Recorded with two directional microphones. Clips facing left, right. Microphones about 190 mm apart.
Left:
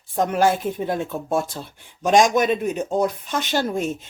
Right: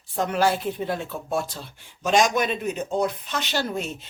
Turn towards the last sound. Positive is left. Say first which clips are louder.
# left 5 dB
turn(degrees=50)  # may be behind; listen again after turning